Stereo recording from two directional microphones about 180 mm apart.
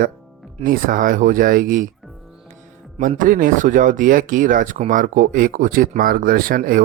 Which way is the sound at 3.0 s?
45° right (ahead or behind).